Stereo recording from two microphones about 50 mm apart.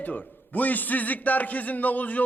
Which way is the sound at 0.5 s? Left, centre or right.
Left.